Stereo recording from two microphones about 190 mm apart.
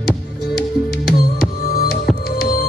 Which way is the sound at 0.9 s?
50° left (ahead or behind).